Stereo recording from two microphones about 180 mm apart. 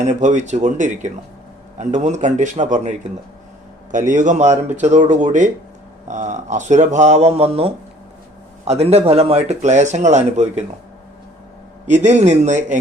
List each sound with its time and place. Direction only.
0.0 s speech: 40° right (ahead or behind)
11.9 s speech: 40° right (ahead or behind)